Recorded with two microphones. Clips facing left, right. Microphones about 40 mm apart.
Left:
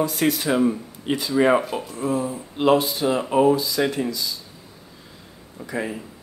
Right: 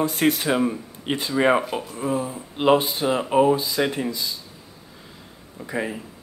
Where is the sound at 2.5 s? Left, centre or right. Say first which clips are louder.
Even; right.